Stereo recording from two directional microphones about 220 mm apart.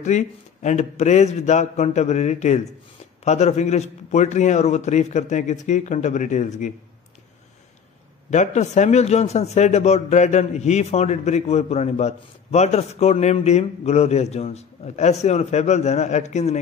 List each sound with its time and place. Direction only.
0.0 s a man's voice: 30° left (ahead or behind)
8.3 s a man's voice: 35° left (ahead or behind)